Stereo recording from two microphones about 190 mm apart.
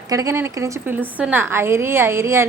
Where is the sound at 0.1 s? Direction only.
15° right (ahead or behind).